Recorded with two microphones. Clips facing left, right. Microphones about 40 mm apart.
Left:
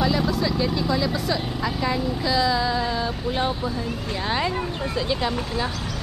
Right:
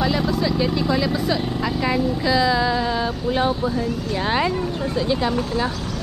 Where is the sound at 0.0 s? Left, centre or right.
Centre.